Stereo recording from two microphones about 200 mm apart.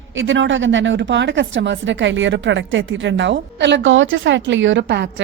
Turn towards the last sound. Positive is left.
turn(degrees=-55)  # may be behind; listen again after turning